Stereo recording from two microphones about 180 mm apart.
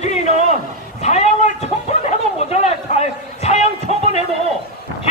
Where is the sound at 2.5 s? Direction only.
40° left (ahead or behind).